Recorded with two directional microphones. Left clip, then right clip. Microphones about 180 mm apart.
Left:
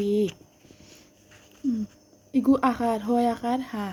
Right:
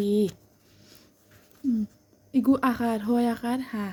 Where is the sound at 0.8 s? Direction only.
55° right (ahead or behind).